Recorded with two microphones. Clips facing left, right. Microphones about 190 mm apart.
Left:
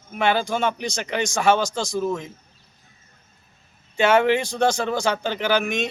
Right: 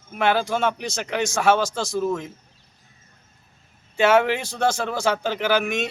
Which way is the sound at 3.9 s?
5° right (ahead or behind).